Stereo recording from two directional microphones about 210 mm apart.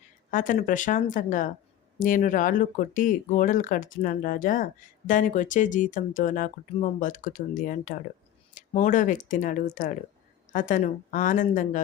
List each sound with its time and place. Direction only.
0.3 s speech: 40° left (ahead or behind)